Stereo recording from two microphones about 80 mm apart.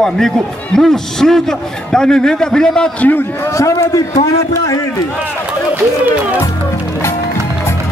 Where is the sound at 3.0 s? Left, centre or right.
Left.